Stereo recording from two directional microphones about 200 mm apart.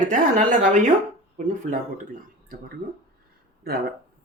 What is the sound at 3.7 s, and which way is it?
Speech, 50° right (ahead or behind).